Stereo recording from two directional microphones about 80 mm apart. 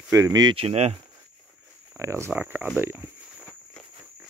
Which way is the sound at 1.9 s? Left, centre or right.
Right.